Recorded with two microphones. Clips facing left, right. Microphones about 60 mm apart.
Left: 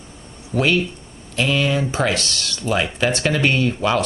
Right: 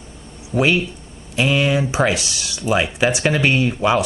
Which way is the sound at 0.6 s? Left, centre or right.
Centre.